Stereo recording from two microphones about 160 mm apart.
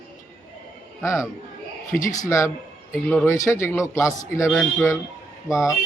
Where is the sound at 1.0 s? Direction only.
20° left (ahead or behind).